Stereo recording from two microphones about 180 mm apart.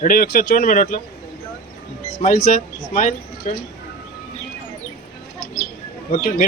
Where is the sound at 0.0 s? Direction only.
50° left (ahead or behind).